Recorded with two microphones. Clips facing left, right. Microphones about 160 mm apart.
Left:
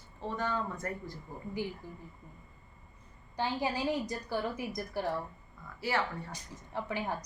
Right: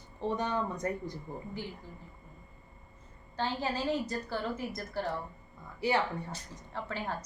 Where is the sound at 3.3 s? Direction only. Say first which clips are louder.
Even; 15° left (ahead or behind).